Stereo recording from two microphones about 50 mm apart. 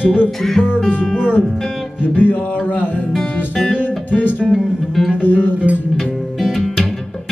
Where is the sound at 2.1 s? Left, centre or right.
Left.